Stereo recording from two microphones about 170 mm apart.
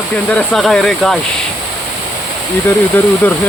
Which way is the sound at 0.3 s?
5° left (ahead or behind).